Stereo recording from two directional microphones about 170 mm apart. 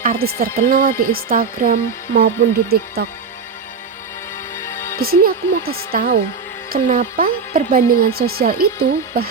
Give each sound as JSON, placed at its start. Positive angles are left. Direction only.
{"t": 0.0, "sound": "speech", "side_deg": -60}
{"t": 4.5, "sound": "music", "side_deg": 15}
{"t": 4.9, "sound": "speech", "side_deg": -65}